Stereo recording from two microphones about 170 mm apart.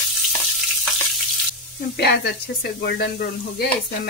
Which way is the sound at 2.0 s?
75° left (ahead or behind).